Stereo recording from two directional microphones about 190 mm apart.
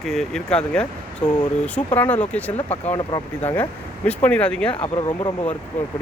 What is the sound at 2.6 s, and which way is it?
Speech, 35° left (ahead or behind).